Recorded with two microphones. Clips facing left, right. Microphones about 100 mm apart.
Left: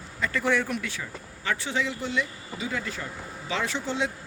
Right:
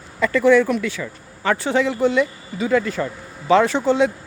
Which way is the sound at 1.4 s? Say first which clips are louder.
Right 10 dB; 50° right (ahead or behind).